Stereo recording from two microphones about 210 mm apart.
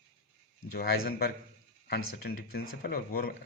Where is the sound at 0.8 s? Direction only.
45° left (ahead or behind).